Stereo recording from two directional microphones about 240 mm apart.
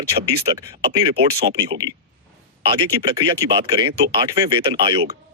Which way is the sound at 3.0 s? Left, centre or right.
Centre.